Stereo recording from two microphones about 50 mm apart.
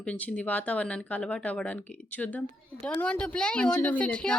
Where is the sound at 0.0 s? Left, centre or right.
Left.